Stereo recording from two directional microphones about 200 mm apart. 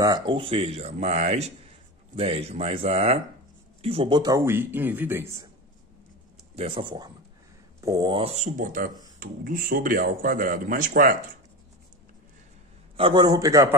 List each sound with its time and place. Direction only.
0.0 s a man's voice: 20° right (ahead or behind)
6.5 s a man's voice: 30° right (ahead or behind); by 11.1 s 45° right (ahead or behind)
12.9 s a man's voice: 25° right (ahead or behind)